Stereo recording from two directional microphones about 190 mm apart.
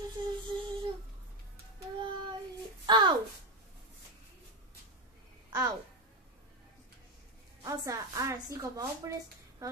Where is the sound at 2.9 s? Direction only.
25° right (ahead or behind).